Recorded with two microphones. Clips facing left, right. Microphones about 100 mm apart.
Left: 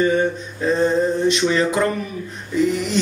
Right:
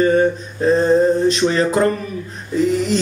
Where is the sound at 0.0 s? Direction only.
40° right (ahead or behind).